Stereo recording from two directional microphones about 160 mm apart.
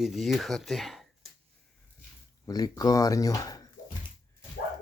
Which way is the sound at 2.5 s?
25° left (ahead or behind).